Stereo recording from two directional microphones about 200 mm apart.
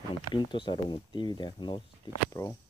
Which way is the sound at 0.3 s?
25° left (ahead or behind).